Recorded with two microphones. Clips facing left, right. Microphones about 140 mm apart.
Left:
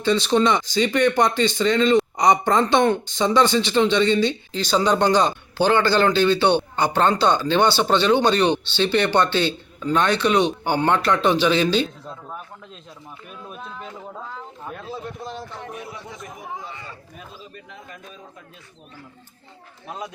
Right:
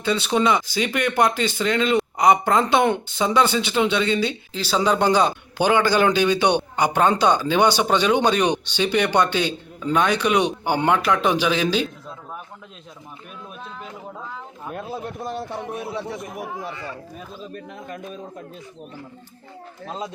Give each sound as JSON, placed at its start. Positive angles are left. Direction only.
{"t": 0.0, "sound": "speech", "side_deg": -5}
{"t": 15.2, "sound": "a man's voice", "side_deg": -55}
{"t": 16.0, "sound": "speech", "side_deg": -70}
{"t": 17.5, "sound": "a man's voice", "side_deg": -45}